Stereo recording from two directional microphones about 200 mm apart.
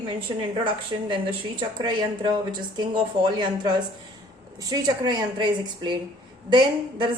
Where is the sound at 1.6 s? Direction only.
25° right (ahead or behind).